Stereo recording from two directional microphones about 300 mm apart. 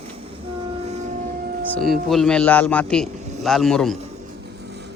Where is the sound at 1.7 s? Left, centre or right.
Centre.